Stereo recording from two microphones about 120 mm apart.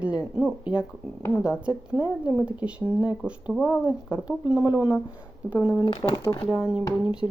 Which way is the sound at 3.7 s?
20° left (ahead or behind).